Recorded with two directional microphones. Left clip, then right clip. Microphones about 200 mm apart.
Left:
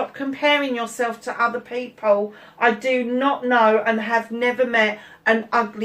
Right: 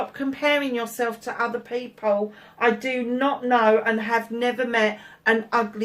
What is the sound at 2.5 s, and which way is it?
Speech, 50° right (ahead or behind).